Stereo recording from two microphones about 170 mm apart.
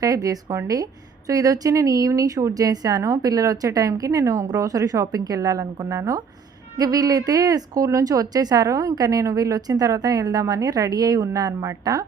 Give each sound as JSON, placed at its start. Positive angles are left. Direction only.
{"t": 0.0, "sound": "speech", "side_deg": -20}